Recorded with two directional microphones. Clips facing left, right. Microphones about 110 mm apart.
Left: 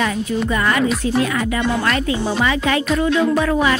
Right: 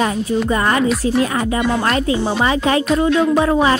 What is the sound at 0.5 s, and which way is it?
A woman's voice, 30° right (ahead or behind).